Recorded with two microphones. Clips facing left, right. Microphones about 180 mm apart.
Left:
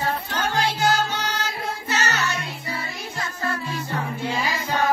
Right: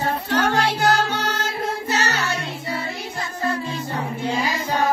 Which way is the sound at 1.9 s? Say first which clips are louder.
Even; 35° right (ahead or behind).